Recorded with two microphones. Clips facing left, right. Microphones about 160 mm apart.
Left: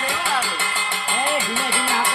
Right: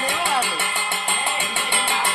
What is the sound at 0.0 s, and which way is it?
Music, 20° right (ahead or behind).